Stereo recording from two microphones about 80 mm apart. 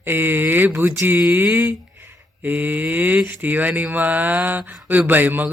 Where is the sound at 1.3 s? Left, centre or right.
Right.